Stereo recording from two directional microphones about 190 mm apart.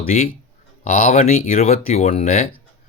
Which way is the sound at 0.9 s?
40° left (ahead or behind).